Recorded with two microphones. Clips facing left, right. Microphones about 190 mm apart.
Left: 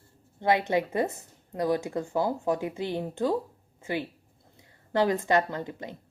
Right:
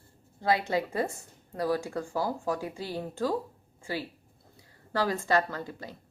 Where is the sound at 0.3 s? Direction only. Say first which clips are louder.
Left 3 dB; 20° left (ahead or behind).